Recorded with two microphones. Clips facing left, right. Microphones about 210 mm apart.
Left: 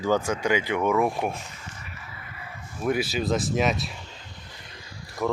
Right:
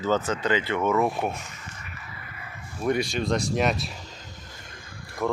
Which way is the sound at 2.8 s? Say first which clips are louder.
Even; 5° left (ahead or behind).